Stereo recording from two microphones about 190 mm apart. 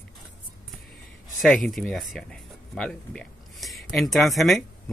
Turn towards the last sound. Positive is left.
turn(degrees=0)  # may be behind; listen again after turning